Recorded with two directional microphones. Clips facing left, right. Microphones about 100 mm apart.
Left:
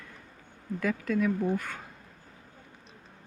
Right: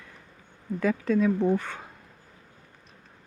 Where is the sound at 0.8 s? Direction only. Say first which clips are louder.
Right 4 dB; 25° right (ahead or behind).